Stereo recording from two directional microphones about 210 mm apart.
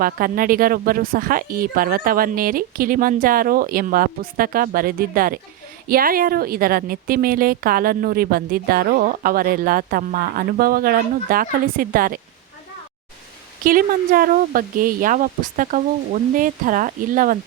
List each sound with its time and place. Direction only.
0.0 s a woman's voice: 45° right (ahead or behind)
13.7 s speech: 45° right (ahead or behind)